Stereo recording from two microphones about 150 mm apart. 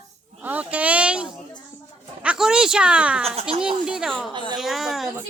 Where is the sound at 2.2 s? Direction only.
5° right (ahead or behind).